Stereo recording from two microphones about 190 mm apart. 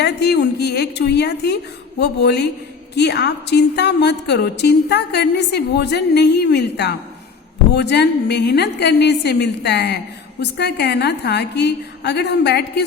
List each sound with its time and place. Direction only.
0.0 s a woman's voice: 60° left (ahead or behind)